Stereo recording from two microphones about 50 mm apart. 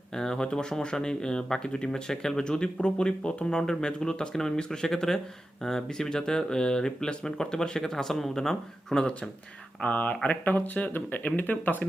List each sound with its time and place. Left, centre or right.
0.1 s speech: centre
9.8 s speech: left